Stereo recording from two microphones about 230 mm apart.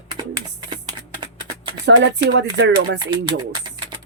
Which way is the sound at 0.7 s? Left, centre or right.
Centre.